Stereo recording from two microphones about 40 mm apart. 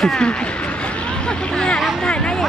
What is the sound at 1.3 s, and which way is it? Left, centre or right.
Speech, centre.